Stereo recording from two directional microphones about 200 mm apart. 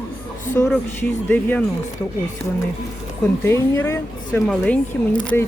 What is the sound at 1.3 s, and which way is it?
Speech, 10° left (ahead or behind).